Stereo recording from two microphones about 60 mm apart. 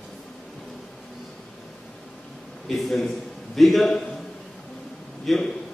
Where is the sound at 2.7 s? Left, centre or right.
Centre.